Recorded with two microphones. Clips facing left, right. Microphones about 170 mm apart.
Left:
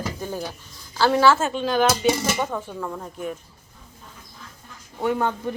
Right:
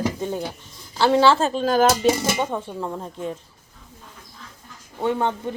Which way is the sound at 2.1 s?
10° right (ahead or behind).